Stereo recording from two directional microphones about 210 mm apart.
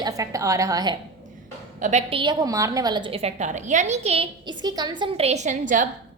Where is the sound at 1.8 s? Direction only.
35° right (ahead or behind).